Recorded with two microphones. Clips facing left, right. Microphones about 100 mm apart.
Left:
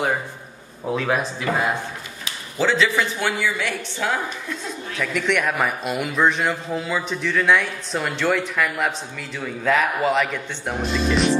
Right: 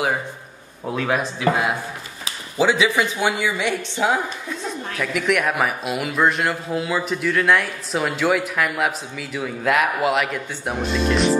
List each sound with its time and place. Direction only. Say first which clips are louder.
0.8 s speech: even; centre (ahead or behind)
2.5 s a woman's voice: right 2 dB; 15° right (ahead or behind)
4.9 s speech: right 1 dB; 5° right (ahead or behind)